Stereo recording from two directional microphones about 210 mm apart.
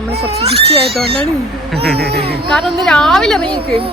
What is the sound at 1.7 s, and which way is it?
Speech, 50° right (ahead or behind).